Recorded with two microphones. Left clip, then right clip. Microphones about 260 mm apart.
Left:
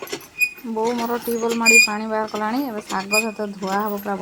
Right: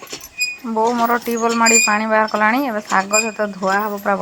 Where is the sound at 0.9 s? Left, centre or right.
Centre.